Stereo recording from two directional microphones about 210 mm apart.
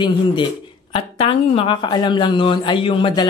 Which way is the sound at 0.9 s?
25° left (ahead or behind).